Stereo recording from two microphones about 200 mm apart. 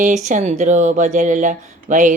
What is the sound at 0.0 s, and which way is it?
Speech, 35° right (ahead or behind).